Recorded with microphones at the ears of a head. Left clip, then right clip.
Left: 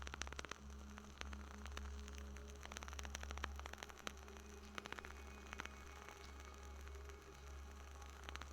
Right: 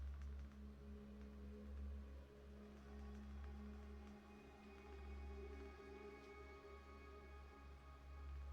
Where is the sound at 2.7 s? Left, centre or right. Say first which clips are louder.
Left 10 dB; left.